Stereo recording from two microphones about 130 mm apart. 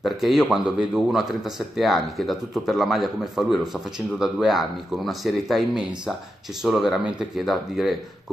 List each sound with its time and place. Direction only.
0.0 s speech: centre (ahead or behind)